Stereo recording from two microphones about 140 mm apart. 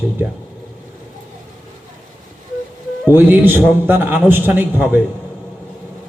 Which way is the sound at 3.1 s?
15° right (ahead or behind).